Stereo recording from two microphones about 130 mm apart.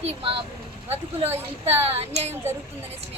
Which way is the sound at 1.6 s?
55° right (ahead or behind).